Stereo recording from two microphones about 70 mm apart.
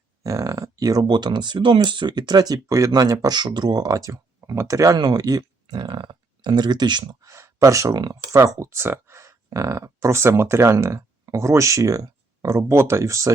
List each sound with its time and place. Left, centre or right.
0.2 s speech: right
7.3 s speech: right